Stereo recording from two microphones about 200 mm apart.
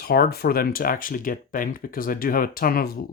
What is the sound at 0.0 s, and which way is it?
Speech, 50° left (ahead or behind).